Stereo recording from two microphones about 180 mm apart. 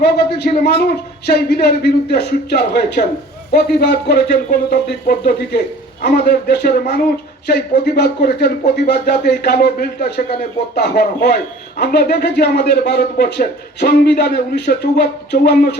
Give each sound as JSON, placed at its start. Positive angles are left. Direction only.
{"t": 0.6, "sound": "a man's voice", "side_deg": 65}